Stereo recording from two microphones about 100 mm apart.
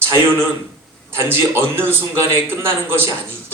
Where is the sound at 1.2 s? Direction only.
25° right (ahead or behind).